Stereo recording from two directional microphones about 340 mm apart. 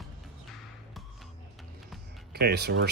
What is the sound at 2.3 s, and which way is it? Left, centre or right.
Speech, right.